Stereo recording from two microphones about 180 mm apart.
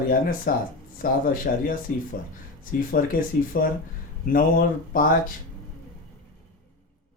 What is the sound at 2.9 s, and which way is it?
Speech, 50° left (ahead or behind).